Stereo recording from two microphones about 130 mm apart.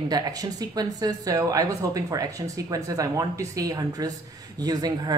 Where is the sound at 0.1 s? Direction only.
30° right (ahead or behind).